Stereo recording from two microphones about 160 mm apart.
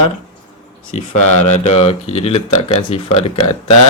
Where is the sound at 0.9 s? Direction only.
45° left (ahead or behind).